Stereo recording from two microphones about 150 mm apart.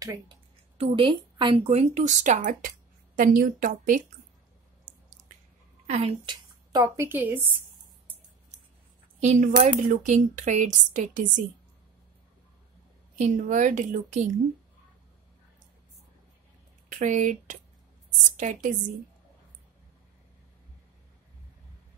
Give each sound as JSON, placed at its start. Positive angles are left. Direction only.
{"t": 0.0, "sound": "a woman's voice", "side_deg": -20}
{"t": 0.7, "sound": "speech", "side_deg": -35}
{"t": 3.2, "sound": "a woman's voice", "side_deg": -70}
{"t": 5.9, "sound": "a woman's voice", "side_deg": -45}
{"t": 6.2, "sound": "speech", "side_deg": -25}
{"t": 9.2, "sound": "a woman's voice", "side_deg": -55}
{"t": 13.2, "sound": "a woman's voice", "side_deg": -55}
{"t": 16.9, "sound": "a woman's voice", "side_deg": -55}